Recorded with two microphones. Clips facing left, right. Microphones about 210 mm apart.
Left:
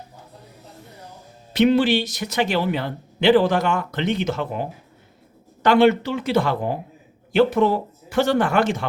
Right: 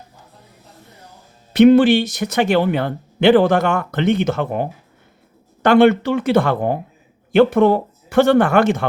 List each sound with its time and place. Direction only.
1.5 s speech: 50° right (ahead or behind)
5.6 s speech: 50° right (ahead or behind)